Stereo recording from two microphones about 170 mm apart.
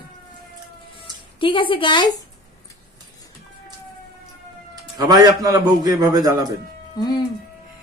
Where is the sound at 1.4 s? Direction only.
30° left (ahead or behind).